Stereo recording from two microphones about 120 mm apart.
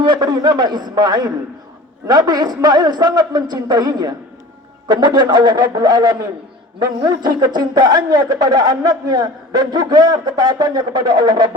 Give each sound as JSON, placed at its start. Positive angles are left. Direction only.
{"t": 0.0, "sound": "a man's voice", "side_deg": -35}